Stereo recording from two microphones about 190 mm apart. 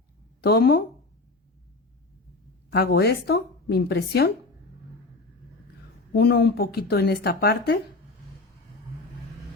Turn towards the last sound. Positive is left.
turn(degrees=55)  # may be behind; listen again after turning